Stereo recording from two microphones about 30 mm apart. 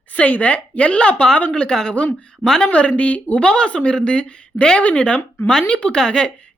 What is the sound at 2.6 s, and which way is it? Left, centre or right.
Speech, left.